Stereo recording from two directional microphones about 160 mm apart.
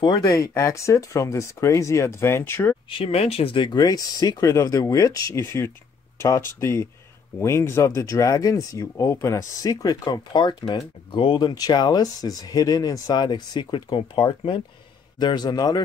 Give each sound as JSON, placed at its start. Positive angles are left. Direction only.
{"t": 0.0, "sound": "speech", "side_deg": 25}
{"t": 2.9, "sound": "speech", "side_deg": 40}